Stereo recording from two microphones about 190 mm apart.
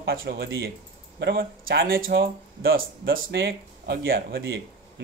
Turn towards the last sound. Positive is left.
turn(degrees=-55)  # may be behind; listen again after turning